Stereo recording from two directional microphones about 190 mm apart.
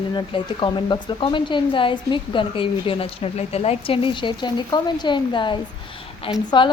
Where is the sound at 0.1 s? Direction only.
25° left (ahead or behind).